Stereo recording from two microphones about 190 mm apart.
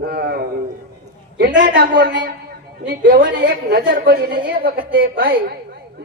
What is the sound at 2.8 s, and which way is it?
A woman's voice, 50° right (ahead or behind).